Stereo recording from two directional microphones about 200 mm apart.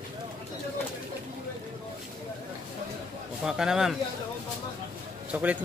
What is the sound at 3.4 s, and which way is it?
Speech, 5° right (ahead or behind).